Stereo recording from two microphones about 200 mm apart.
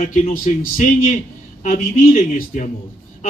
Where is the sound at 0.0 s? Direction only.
40° left (ahead or behind).